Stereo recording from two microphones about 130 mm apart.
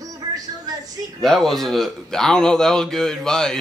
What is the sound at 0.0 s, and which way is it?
Music, 30° right (ahead or behind).